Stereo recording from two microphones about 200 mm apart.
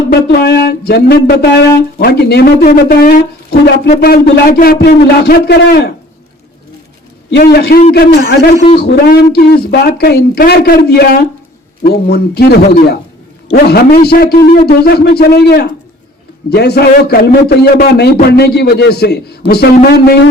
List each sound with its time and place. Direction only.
0.1 s a man's voice: 55° left (ahead or behind)
7.3 s a man's voice: 55° left (ahead or behind)